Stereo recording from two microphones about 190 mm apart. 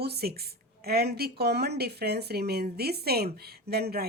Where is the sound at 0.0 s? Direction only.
55° right (ahead or behind).